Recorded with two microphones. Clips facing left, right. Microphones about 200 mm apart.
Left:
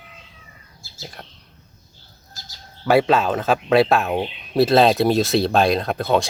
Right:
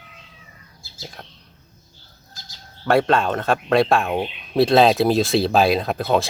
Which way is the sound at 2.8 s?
5° left (ahead or behind).